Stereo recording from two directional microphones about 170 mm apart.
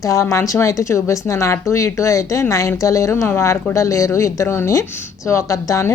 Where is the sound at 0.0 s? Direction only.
15° left (ahead or behind).